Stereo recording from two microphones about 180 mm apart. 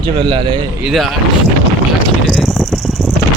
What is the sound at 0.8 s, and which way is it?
Speech, centre (ahead or behind).